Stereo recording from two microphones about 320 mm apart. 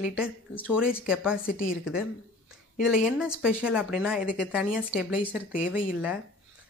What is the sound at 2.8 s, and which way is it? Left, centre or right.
Speech, centre.